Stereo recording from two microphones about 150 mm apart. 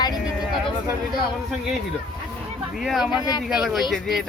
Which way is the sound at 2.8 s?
Centre (ahead or behind).